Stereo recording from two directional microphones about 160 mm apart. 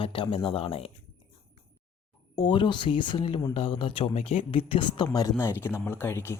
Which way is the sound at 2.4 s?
30° left (ahead or behind).